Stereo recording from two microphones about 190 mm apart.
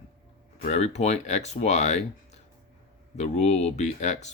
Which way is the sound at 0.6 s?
35° left (ahead or behind).